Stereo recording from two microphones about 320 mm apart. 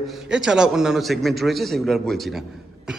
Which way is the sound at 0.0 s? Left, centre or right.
Centre.